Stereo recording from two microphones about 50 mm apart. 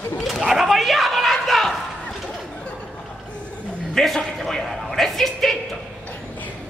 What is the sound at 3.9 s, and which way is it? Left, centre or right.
A man's voice, centre.